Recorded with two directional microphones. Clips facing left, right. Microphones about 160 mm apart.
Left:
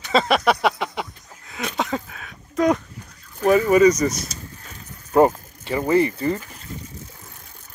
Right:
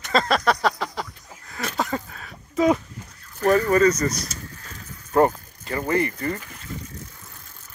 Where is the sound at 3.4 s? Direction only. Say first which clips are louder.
Left 3 dB; 5° left (ahead or behind).